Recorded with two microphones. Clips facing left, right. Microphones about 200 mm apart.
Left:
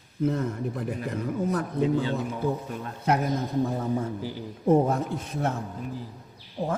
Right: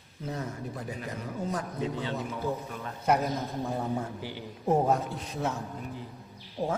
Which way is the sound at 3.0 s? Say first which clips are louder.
Left 1 dB; 65° left (ahead or behind).